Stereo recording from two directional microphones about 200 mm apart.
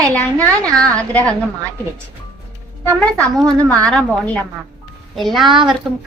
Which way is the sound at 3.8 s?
5° left (ahead or behind).